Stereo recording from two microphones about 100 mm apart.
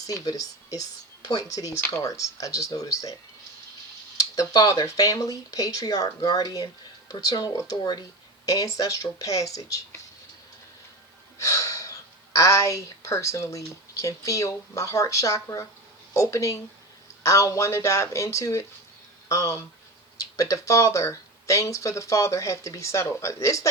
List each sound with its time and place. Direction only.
0.1 s speech: 35° left (ahead or behind)
4.2 s speech: 35° left (ahead or behind)
11.3 s speech: 35° left (ahead or behind)